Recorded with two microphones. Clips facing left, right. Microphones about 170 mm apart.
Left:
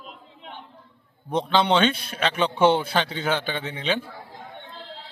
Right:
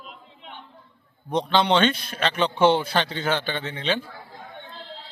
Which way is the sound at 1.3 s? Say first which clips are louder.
Even; 5° left (ahead or behind).